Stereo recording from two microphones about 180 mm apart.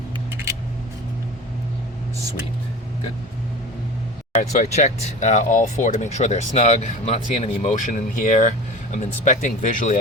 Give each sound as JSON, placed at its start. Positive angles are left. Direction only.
{"t": 4.4, "sound": "speech", "side_deg": 40}